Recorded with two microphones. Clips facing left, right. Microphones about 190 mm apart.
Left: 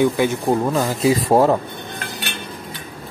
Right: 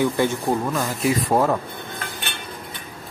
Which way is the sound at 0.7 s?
25° left (ahead or behind).